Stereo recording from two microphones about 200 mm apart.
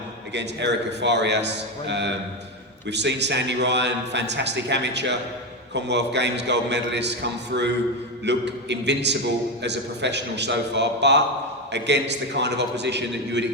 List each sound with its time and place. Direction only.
0.3 s a man's voice: 60° right (ahead or behind)